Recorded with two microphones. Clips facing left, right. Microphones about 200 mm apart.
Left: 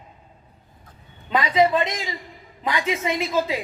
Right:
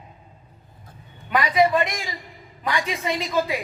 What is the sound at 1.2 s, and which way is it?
A woman's voice, 25° left (ahead or behind).